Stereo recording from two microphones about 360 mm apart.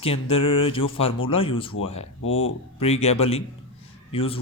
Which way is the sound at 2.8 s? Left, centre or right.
Centre.